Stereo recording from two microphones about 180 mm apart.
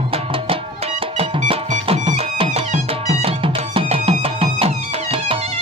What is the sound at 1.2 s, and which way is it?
Music, 35° right (ahead or behind).